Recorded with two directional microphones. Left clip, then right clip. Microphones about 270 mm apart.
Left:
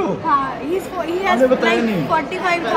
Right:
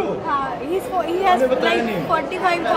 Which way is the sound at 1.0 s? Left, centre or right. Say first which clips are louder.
Even; centre.